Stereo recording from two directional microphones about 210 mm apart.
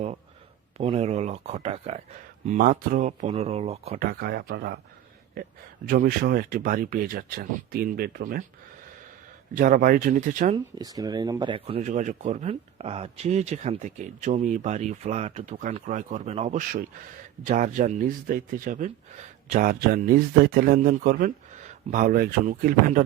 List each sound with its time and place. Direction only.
0.8 s speech: 30° right (ahead or behind)
2.5 s speech: 40° right (ahead or behind)
9.6 s speech: 40° right (ahead or behind)
10.5 s speech: 20° right (ahead or behind); by 23.0 s 40° right (ahead or behind)